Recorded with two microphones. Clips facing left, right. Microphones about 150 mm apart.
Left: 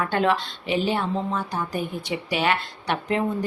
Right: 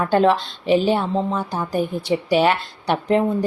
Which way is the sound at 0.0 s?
35° right (ahead or behind).